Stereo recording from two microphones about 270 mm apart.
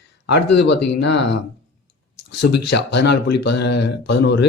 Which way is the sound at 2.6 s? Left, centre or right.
Left.